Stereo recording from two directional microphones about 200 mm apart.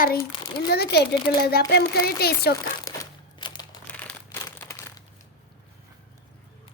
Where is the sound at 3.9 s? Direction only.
5° left (ahead or behind).